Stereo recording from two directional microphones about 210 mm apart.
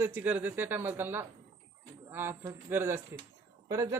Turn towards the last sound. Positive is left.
turn(degrees=-15)  # may be behind; listen again after turning